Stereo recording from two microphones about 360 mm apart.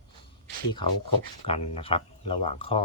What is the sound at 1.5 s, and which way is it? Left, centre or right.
Speech, centre.